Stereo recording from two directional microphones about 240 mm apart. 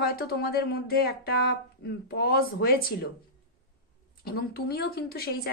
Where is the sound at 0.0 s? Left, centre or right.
Left.